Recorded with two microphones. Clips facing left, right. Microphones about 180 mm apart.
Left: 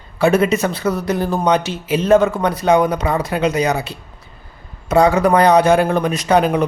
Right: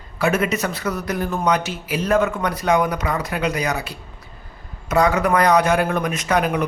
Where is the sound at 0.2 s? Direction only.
30° left (ahead or behind).